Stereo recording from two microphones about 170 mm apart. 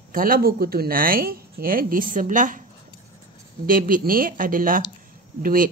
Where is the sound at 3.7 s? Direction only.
55° right (ahead or behind).